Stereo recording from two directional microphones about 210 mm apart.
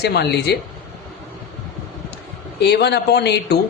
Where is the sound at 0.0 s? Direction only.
50° left (ahead or behind).